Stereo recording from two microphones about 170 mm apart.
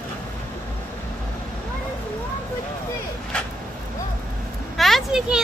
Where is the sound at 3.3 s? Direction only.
5° left (ahead or behind).